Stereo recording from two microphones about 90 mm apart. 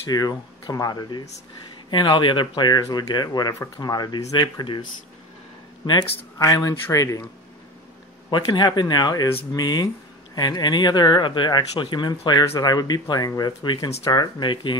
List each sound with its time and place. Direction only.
0.1 s speech: 45° left (ahead or behind)
1.9 s speech: 65° left (ahead or behind)
6.3 s speech: 40° left (ahead or behind)
8.3 s speech: 55° left (ahead or behind)